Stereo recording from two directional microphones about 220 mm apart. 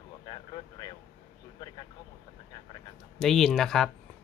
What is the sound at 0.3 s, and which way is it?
Vehicle, 20° left (ahead or behind).